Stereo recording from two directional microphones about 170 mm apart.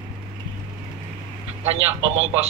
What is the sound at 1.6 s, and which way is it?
Speech, 35° right (ahead or behind).